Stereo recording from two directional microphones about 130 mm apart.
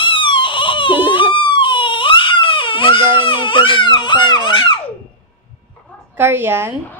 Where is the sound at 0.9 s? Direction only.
15° right (ahead or behind).